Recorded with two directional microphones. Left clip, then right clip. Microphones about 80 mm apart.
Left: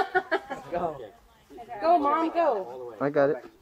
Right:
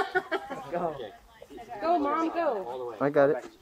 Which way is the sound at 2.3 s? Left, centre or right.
Left.